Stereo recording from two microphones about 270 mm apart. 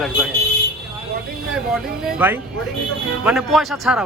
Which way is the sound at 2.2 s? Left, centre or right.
Centre.